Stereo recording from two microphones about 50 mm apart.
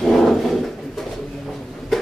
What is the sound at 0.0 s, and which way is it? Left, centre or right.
Dog, centre.